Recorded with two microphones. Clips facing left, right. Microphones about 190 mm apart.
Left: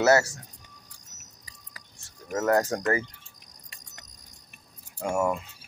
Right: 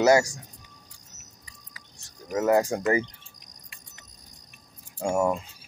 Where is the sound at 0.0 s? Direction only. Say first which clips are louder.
Right 2 dB; 15° right (ahead or behind).